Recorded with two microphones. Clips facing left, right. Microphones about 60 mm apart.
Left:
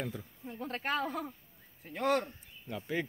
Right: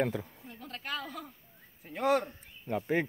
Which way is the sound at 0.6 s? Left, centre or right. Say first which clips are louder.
Left 5 dB; left.